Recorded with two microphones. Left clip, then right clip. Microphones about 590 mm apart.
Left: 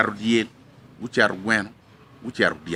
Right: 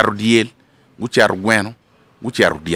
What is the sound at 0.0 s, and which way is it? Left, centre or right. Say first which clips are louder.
Speech: right 7 dB; right.